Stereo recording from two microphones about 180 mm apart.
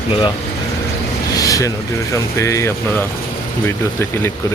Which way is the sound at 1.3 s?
20° left (ahead or behind).